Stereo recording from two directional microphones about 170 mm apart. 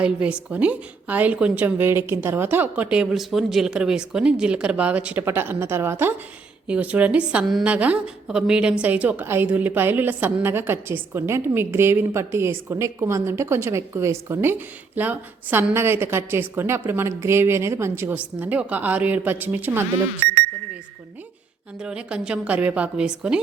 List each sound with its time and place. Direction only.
0.0 s a woman's voice: 5° right (ahead or behind)
21.8 s a woman's voice: 5° right (ahead or behind)